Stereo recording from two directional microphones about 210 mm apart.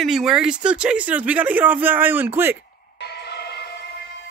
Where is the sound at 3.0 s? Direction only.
50° left (ahead or behind).